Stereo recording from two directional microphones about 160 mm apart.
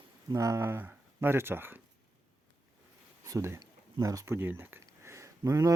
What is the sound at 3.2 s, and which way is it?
Speech, 20° right (ahead or behind).